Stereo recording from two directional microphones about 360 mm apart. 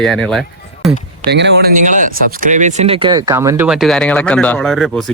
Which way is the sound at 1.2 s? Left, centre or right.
Right.